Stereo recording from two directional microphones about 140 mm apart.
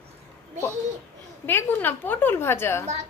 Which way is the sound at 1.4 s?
15° left (ahead or behind).